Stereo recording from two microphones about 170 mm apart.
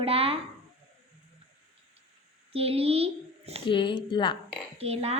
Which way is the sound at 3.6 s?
30° left (ahead or behind).